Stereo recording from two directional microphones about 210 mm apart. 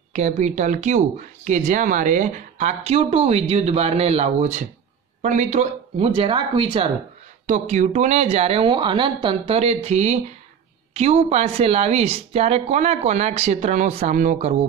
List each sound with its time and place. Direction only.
0.1 s speech: 35° right (ahead or behind)
7.4 s speech: 35° right (ahead or behind)